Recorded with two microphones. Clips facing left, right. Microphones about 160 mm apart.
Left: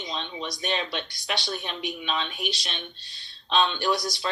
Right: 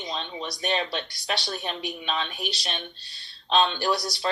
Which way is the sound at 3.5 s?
35° right (ahead or behind).